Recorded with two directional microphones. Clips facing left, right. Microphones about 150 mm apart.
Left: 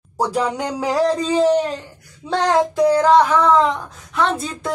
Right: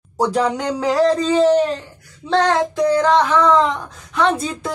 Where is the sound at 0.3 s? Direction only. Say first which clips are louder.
Right 2 dB; 10° left (ahead or behind).